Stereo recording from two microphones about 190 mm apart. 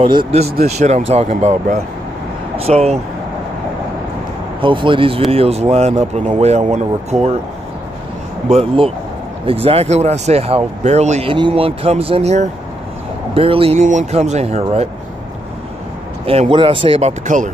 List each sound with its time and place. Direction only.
0.0 s speech: 25° right (ahead or behind)
4.6 s speech: 25° right (ahead or behind)
8.5 s speech: 30° right (ahead or behind)
16.3 s speech: 30° right (ahead or behind)